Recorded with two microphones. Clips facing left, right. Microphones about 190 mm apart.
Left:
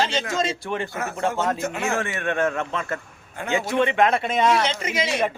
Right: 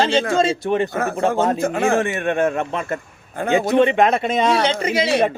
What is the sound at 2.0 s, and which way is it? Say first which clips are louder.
A man's voice: right 5 dB; 15° right (ahead or behind).